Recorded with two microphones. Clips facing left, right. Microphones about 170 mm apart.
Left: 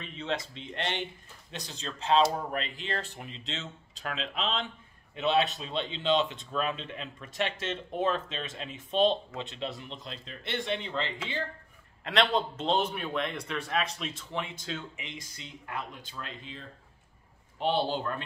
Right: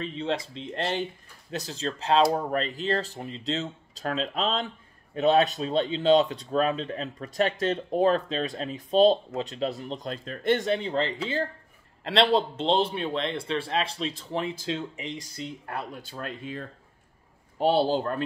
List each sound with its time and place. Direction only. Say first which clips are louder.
0.0 s a man's voice: right 5 dB; 35° right (ahead or behind)